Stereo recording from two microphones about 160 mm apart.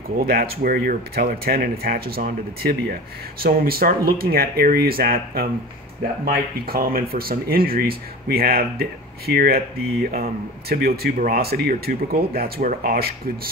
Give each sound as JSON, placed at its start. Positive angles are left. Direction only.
{"t": 0.2, "sound": "speech", "side_deg": -70}